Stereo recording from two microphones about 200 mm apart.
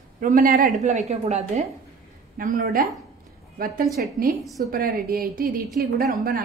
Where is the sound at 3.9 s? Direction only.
50° right (ahead or behind).